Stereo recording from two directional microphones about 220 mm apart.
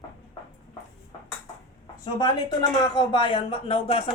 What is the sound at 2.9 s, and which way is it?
Speech, 20° left (ahead or behind).